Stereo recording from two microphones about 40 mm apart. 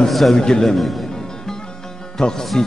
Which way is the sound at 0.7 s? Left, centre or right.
Centre.